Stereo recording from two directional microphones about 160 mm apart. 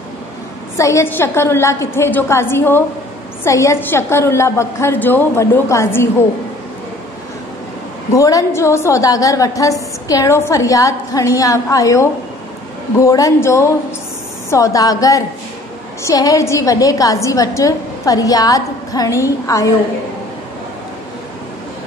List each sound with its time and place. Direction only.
0.7 s a woman's voice: 20° left (ahead or behind)
8.1 s a woman's voice: 20° left (ahead or behind)